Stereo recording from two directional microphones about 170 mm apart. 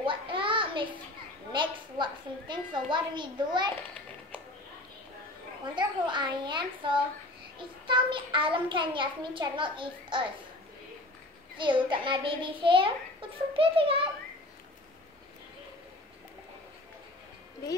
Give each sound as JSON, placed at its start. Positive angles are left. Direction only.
{"t": 0.0, "sound": "a sound", "side_deg": -30}
{"t": 1.5, "sound": "a woman's voice", "side_deg": -25}
{"t": 5.8, "sound": "a child's voice", "side_deg": -25}
{"t": 11.5, "sound": "a child's voice", "side_deg": -30}